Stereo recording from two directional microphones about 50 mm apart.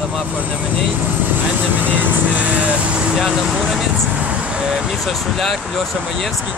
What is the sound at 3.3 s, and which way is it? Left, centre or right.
Speech, centre.